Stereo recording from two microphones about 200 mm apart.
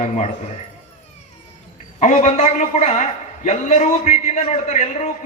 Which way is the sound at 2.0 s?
35° left (ahead or behind).